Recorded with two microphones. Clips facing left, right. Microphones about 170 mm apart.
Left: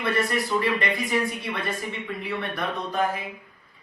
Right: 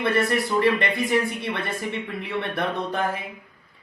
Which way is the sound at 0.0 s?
25° right (ahead or behind).